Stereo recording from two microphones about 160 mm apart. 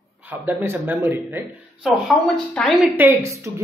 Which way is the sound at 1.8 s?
5° right (ahead or behind).